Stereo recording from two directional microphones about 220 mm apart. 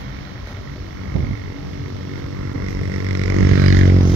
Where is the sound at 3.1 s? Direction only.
90° right.